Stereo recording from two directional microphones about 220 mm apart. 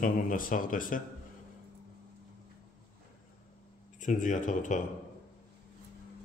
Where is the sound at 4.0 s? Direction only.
35° left (ahead or behind).